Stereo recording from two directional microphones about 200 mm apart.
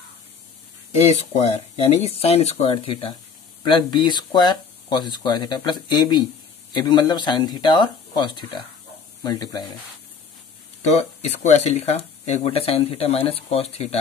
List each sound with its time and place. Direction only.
1.0 s speech: 30° left (ahead or behind)
10.9 s speech: 30° left (ahead or behind)